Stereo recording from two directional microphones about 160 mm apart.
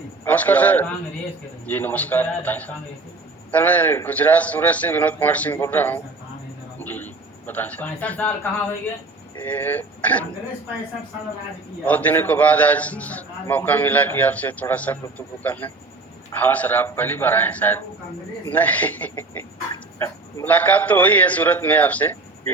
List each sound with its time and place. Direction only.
0.3 s a man's voice: 10° left (ahead or behind)
11.9 s a man's voice: 10° left (ahead or behind)